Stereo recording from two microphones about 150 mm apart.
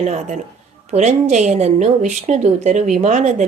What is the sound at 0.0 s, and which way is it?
A woman's voice, 50° right (ahead or behind).